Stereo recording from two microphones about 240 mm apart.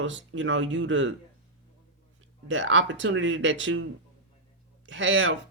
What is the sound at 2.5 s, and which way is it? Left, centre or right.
Speech, right.